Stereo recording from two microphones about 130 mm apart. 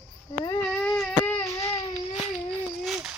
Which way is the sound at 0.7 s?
5° left (ahead or behind).